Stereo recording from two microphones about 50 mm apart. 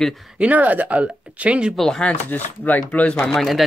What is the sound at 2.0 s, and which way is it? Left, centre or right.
Speech, left.